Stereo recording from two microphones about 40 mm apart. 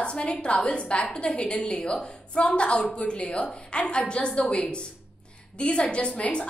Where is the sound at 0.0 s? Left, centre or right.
Left.